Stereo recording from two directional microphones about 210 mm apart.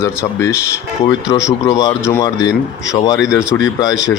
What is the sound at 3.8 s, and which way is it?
Speech, 15° left (ahead or behind).